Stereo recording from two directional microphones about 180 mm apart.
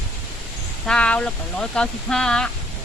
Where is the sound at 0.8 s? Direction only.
5° left (ahead or behind).